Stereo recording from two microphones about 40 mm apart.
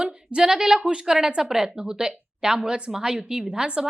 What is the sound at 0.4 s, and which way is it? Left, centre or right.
A woman's voice, centre.